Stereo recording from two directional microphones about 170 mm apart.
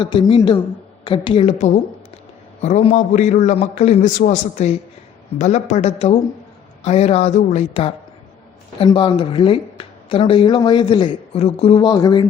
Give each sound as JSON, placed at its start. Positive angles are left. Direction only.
{"t": 0.0, "sound": "a man's voice", "side_deg": 30}